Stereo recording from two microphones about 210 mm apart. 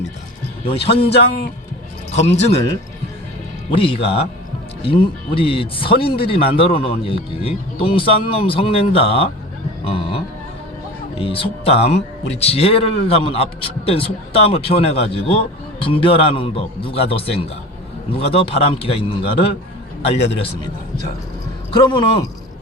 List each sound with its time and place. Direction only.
0.6 s a man's voice: 25° left (ahead or behind)
2.3 s speech: 30° left (ahead or behind)
3.7 s a man's voice: 25° left (ahead or behind)
9.8 s a sound: 25° left (ahead or behind)
11.2 s a man's voice: 25° left (ahead or behind)
20.1 s a man's voice: 55° left (ahead or behind)
21.7 s a man's voice: 25° left (ahead or behind)